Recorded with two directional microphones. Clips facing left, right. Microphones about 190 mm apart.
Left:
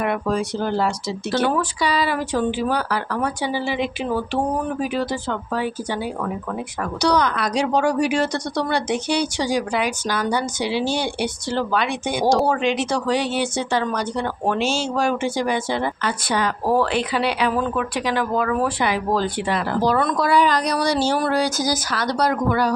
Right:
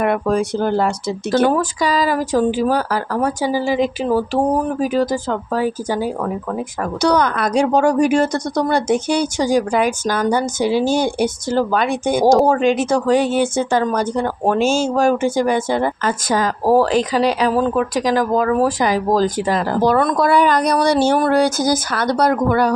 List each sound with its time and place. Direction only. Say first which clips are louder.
0.0 s a woman's voice: right 5 dB; 50° right (ahead or behind)
19.8 s speech: right 5 dB; 50° right (ahead or behind)